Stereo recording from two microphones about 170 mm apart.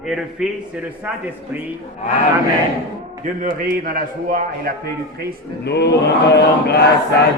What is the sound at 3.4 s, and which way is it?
A man's voice, 55° right (ahead or behind).